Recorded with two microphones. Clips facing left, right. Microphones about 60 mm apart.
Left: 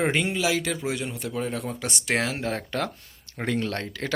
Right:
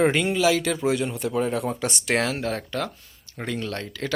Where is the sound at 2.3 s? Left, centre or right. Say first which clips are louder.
Right 1 dB; centre.